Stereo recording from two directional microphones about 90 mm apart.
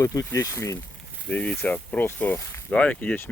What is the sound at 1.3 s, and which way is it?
Speech, 20° left (ahead or behind).